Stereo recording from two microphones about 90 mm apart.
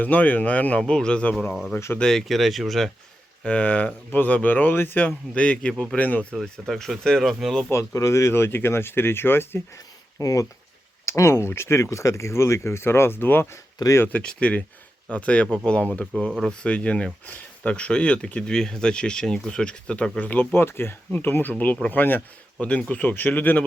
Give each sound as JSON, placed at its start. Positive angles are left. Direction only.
{"t": 0.0, "sound": "speech", "side_deg": 15}
{"t": 1.7, "sound": "speech", "side_deg": 25}
{"t": 2.0, "sound": "speech", "side_deg": 5}
{"t": 3.4, "sound": "speech", "side_deg": 15}
{"t": 6.4, "sound": "speech", "side_deg": 5}
{"t": 7.7, "sound": "speech", "side_deg": 35}
{"t": 9.7, "sound": "a sound", "side_deg": 40}
{"t": 11.0, "sound": "speech", "side_deg": 30}
{"t": 14.1, "sound": "speech", "side_deg": 10}